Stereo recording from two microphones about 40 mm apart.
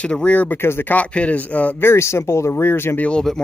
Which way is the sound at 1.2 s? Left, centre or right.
Left.